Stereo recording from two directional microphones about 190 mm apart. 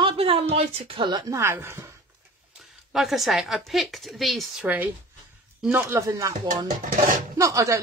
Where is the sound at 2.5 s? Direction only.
Centre (ahead or behind); by 6.3 s 15° right (ahead or behind).